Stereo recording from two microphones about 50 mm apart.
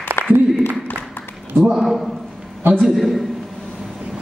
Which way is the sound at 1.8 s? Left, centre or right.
Centre.